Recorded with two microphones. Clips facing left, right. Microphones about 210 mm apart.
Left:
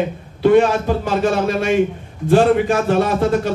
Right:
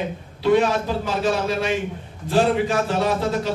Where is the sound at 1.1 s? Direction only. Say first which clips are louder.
Left 4 dB; 55° left (ahead or behind).